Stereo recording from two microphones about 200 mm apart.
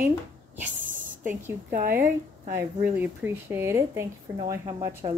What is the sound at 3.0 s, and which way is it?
Speech, 10° right (ahead or behind).